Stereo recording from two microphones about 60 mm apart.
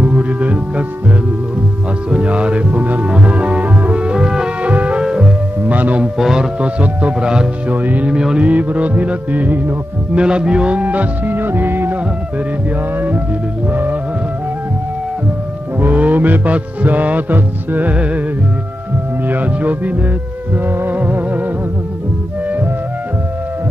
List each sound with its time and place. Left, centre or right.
0.0 s music: right
2.0 s music: centre
5.6 s music: right
6.1 s speech: centre
6.8 s music: right
7.7 s music: right
8.1 s speech: centre
8.5 s music: right
10.1 s music: centre; by 12.0 s right
13.7 s music: right
15.8 s music: right
19.2 s speech: right
20.6 s music: right